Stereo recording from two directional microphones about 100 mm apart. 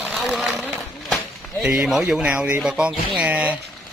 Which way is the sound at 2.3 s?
20° right (ahead or behind).